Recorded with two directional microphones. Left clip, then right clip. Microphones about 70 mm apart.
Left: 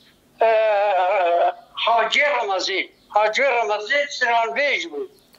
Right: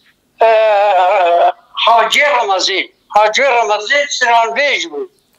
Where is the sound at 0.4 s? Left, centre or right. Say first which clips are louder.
Right 8 dB; right.